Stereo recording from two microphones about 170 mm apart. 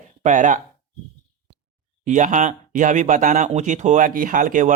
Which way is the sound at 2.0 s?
45° right (ahead or behind).